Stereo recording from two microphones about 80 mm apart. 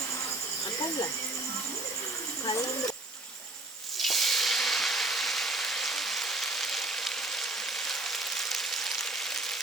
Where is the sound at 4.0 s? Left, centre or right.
Centre.